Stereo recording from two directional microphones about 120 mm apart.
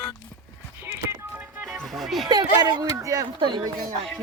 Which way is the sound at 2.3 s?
35° right (ahead or behind).